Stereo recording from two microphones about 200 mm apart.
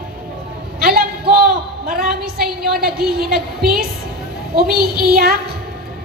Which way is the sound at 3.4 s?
Centre (ahead or behind).